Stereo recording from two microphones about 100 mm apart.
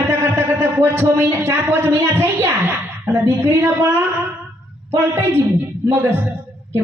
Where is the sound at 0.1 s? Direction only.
25° right (ahead or behind).